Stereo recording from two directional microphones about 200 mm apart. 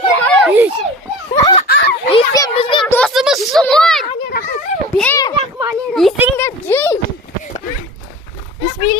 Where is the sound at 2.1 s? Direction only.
20° left (ahead or behind).